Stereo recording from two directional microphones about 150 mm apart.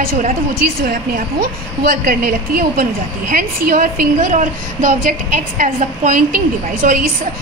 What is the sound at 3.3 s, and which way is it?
A woman's voice, 65° right (ahead or behind).